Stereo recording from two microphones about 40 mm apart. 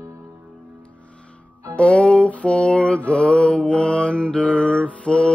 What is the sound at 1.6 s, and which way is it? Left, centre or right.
Music, left.